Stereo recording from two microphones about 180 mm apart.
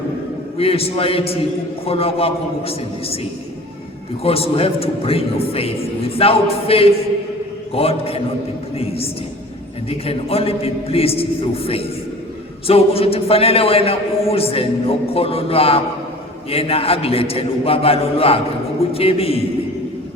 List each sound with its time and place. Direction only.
0.5 s a man's voice: 30° left (ahead or behind)
4.2 s a man's voice: 35° left (ahead or behind)
10.1 s a man's voice: 30° left (ahead or behind)